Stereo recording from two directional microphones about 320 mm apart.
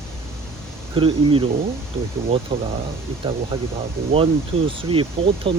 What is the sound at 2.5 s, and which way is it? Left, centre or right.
Speech, centre.